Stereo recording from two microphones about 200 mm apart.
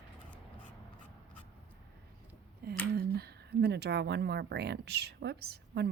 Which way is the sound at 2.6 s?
50° right (ahead or behind).